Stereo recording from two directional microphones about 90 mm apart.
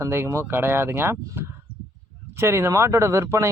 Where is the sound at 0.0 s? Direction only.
30° right (ahead or behind).